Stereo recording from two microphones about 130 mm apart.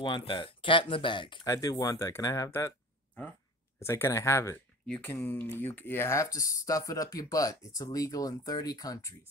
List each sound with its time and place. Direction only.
0.0 s speech: 40° left (ahead or behind)
1.5 s speech: 25° left (ahead or behind)
3.8 s speech: 20° left (ahead or behind)
4.8 s speech: 5° left (ahead or behind); by 9.1 s 30° left (ahead or behind)